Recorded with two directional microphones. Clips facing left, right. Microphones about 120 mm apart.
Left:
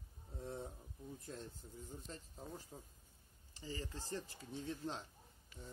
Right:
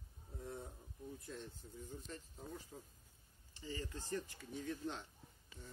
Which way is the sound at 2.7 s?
10° left (ahead or behind).